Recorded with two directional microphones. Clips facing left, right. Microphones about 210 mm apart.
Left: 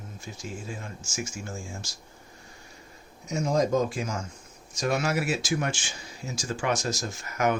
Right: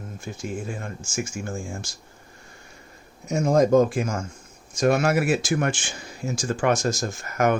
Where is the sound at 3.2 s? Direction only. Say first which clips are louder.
Right 6 dB; 50° right (ahead or behind).